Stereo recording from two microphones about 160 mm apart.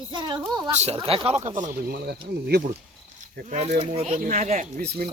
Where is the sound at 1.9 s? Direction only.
80° right.